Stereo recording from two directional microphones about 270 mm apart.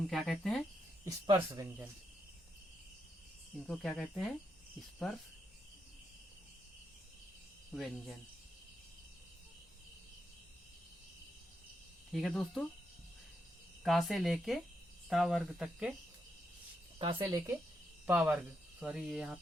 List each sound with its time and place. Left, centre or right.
0.1 s speech: centre
1.0 s speech: centre
3.7 s speech: centre
7.7 s speech: centre
12.1 s speech: centre
13.8 s speech: centre
17.0 s speech: centre